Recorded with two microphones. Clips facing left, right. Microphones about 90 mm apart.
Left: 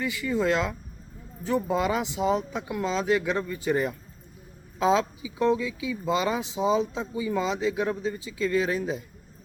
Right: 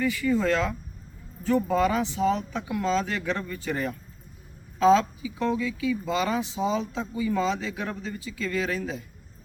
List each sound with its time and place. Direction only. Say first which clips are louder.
0.0 s speech: right 2 dB; 15° left (ahead or behind)